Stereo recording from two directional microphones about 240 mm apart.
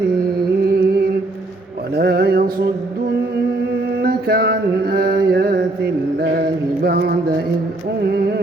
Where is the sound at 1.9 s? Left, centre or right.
Right.